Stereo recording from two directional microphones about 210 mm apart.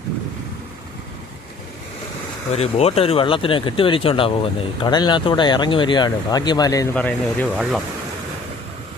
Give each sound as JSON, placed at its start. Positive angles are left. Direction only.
{"t": 2.6, "sound": "speech", "side_deg": 30}